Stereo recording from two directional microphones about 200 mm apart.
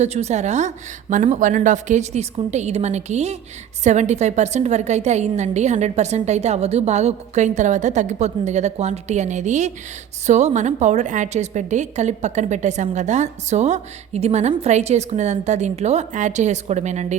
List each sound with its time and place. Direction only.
0.0 s a woman's voice: 35° right (ahead or behind)